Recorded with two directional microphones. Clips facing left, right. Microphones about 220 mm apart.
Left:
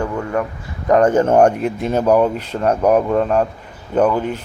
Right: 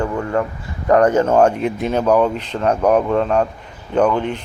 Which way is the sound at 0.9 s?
20° left (ahead or behind).